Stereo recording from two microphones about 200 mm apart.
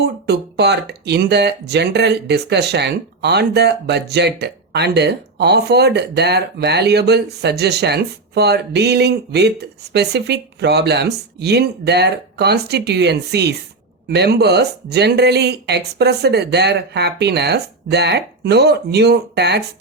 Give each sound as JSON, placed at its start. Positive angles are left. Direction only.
{"t": 0.0, "sound": "speech", "side_deg": -55}